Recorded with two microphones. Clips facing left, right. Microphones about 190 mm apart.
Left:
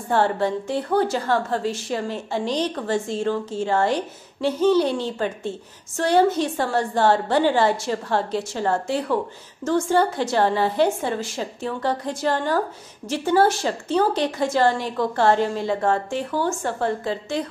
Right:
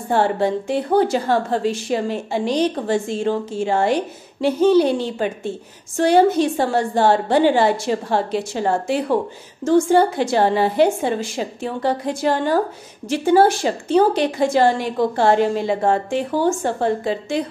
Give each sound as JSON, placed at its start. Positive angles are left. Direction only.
{"t": 0.1, "sound": "a woman's voice", "side_deg": -15}